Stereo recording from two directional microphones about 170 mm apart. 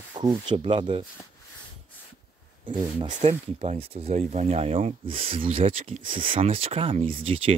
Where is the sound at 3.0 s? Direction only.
35° right (ahead or behind).